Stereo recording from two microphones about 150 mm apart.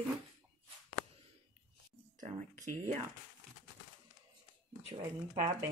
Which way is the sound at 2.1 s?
55° right (ahead or behind).